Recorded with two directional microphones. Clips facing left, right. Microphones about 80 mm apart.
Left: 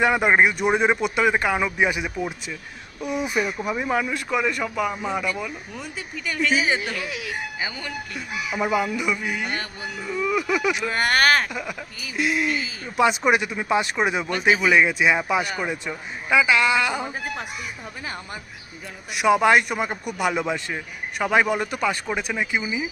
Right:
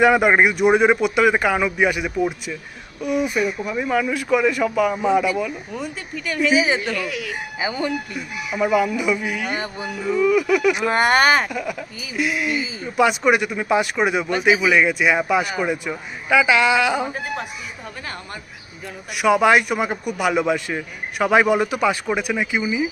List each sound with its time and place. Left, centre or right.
0.0 s a man's voice: centre
4.4 s a man's voice: centre
7.6 s speech: right
8.5 s a man's voice: centre
9.6 s speech: centre
10.2 s a man's voice: centre
10.8 s speech: right
11.4 s a man's voice: centre
16.5 s speech: centre
19.1 s a man's voice: centre